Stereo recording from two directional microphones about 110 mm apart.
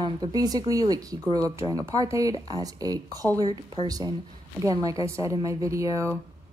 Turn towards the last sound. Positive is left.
turn(degrees=-30)  # may be behind; listen again after turning